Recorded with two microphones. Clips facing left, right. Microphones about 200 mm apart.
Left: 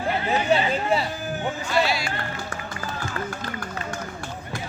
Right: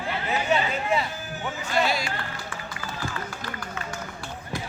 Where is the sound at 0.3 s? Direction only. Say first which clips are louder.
Left 3 dB; 35° left (ahead or behind).